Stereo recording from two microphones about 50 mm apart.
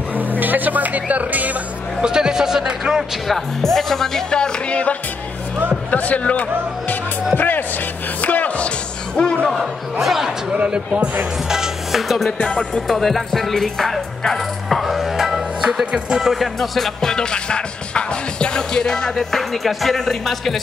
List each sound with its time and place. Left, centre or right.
0.1 s speech: right
2.0 s a sound: centre
3.3 s music: centre; by 4.9 s left
5.9 s speech: left
7.3 s speech: left; by 9.5 s centre
9.5 s music: centre
10.5 s speech: right
11.4 s music: centre
12.3 s music: centre
12.8 s music: centre
15.8 s speech: centre
16.5 s music: centre